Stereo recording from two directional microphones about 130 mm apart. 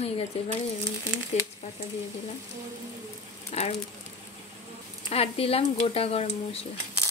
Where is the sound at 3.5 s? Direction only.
55° left (ahead or behind).